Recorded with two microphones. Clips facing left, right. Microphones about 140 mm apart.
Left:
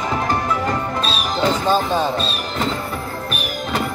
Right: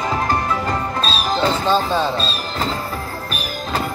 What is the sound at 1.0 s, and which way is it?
Music, 20° left (ahead or behind).